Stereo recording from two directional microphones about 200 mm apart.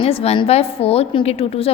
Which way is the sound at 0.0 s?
30° left (ahead or behind).